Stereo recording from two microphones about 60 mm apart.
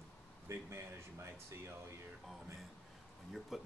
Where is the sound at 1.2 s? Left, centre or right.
Right.